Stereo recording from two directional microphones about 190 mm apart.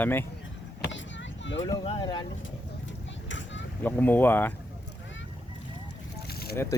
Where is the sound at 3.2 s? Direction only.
75° left (ahead or behind).